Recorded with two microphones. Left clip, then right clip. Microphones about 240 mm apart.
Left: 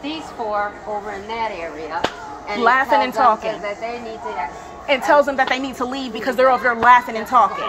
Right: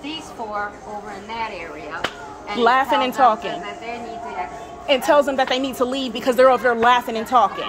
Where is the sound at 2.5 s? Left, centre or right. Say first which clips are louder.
Left 1 dB; centre.